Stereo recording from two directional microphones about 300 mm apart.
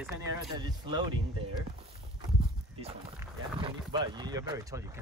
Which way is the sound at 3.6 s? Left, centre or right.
Centre.